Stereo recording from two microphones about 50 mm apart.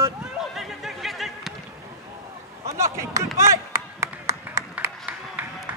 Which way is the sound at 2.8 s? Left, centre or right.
Right.